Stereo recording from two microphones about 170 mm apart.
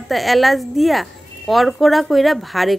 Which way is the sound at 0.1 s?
Centre (ahead or behind).